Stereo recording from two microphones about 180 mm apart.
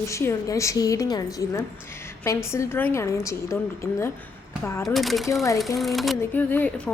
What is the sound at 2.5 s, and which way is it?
A woman's voice, 15° left (ahead or behind).